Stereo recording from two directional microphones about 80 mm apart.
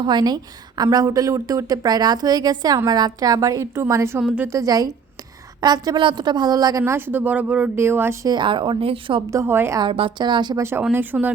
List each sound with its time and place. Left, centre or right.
0.0 s a woman's voice: right
0.8 s a woman's voice: right
6.8 s speech: right
7.8 s a woman's voice: right
8.4 s a woman's voice: right
9.3 s a woman's voice: right
9.8 s speech: right
10.6 s speech: right